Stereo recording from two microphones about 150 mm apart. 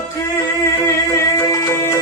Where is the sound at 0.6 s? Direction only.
15° left (ahead or behind).